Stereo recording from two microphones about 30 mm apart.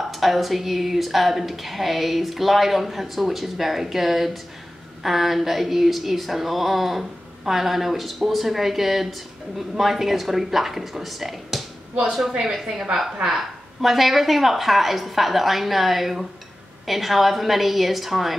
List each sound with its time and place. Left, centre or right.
0.1 s speech: centre
12.3 s a woman's voice: centre